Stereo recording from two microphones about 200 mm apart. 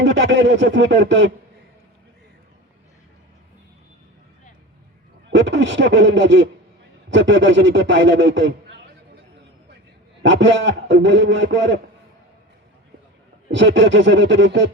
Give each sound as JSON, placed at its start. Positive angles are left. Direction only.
{"t": 0.0, "sound": "a man's voice", "side_deg": -60}
{"t": 5.3, "sound": "a man's voice", "side_deg": -65}
{"t": 10.2, "sound": "a man's voice", "side_deg": -65}
{"t": 13.5, "sound": "a man's voice", "side_deg": -65}